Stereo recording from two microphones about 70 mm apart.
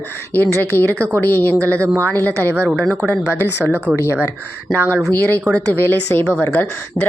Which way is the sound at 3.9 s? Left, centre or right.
Left.